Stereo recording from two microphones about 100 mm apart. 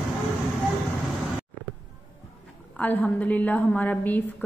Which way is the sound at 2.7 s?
15° left (ahead or behind).